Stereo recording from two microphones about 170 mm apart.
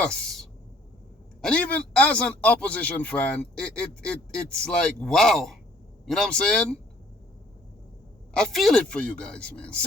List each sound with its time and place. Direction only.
0.0 s a sound: 5° left (ahead or behind)
1.4 s a man's voice: 5° left (ahead or behind)
8.3 s a man's voice: centre (ahead or behind)